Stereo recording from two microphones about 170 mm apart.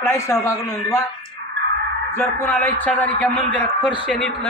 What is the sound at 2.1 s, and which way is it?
A man's voice, 15° left (ahead or behind).